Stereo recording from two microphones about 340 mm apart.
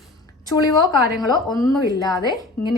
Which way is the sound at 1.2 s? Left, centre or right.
Centre.